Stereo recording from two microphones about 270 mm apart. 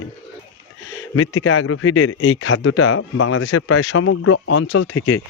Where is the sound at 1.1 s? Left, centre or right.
Left.